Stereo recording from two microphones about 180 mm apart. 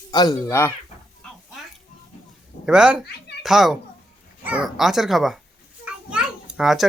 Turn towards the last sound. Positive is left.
turn(degrees=0)  # may be behind; listen again after turning